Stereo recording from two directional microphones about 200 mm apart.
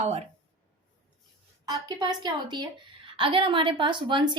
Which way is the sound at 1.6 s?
20° right (ahead or behind).